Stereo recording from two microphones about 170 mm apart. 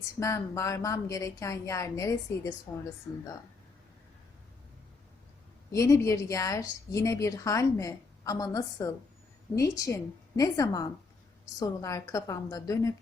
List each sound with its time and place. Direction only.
0.2 s a woman's voice: 20° left (ahead or behind)
5.7 s a woman's voice: 20° left (ahead or behind)